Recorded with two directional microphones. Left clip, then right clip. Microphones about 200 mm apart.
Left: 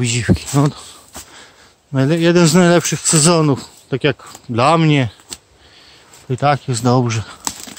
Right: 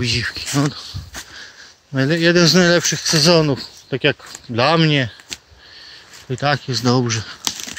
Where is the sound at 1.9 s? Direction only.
15° left (ahead or behind).